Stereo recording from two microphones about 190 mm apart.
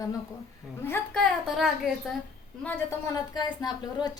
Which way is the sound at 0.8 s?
10° left (ahead or behind).